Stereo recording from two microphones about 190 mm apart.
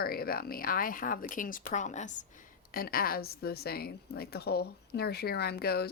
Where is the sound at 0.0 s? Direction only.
50° left (ahead or behind).